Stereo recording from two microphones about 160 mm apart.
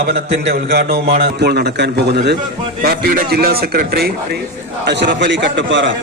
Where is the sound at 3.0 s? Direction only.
70° right (ahead or behind).